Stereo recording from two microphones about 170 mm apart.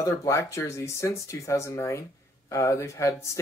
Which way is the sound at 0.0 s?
20° left (ahead or behind).